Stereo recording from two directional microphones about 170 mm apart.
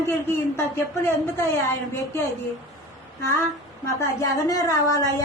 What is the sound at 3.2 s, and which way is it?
A man's voice, 15° left (ahead or behind).